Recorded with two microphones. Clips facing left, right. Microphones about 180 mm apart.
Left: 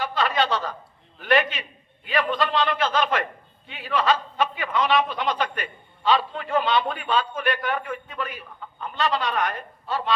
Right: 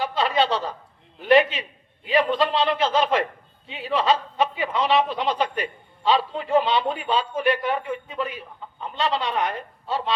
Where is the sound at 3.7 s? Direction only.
25° right (ahead or behind).